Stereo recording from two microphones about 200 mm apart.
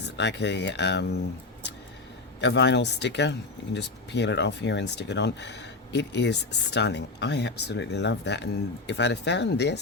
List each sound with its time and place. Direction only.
0.0 s speech: 60° left (ahead or behind)
2.4 s speech: 60° left (ahead or behind)